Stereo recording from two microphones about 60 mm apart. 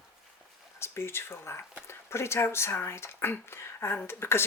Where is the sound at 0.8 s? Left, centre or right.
Left.